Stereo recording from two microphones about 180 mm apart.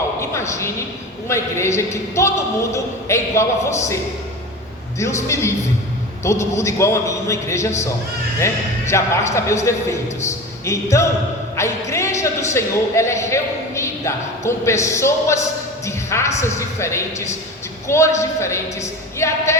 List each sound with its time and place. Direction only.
0.2 s speech: 15° left (ahead or behind)
4.9 s speech: 15° left (ahead or behind)